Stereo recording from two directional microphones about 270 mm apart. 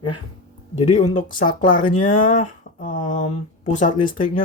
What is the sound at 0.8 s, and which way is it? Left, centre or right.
Speech, left.